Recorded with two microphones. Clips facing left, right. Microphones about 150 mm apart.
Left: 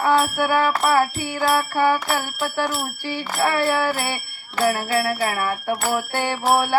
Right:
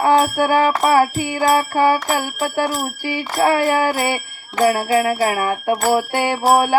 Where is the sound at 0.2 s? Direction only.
35° right (ahead or behind).